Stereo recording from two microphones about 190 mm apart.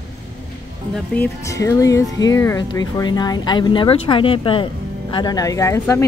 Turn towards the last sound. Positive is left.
turn(degrees=15)  # may be behind; listen again after turning